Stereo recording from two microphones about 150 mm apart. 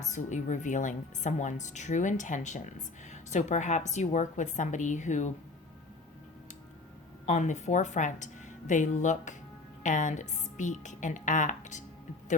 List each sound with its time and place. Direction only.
0.0 s a woman's voice: 55° left (ahead or behind)
7.3 s a woman's voice: 55° left (ahead or behind)